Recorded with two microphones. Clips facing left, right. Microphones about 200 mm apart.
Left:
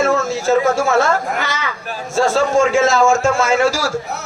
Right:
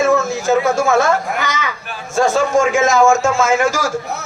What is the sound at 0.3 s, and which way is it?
Speech, 15° right (ahead or behind).